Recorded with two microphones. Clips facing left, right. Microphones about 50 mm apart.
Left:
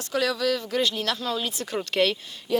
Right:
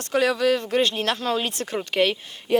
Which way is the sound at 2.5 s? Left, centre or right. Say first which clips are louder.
Right 4 dB; right.